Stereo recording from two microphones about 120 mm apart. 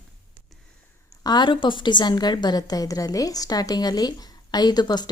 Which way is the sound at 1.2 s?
35° left (ahead or behind).